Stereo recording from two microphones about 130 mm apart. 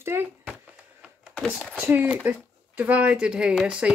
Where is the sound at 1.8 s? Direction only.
15° right (ahead or behind).